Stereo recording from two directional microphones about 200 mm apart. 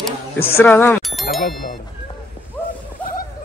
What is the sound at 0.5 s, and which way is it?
Speech, 10° left (ahead or behind).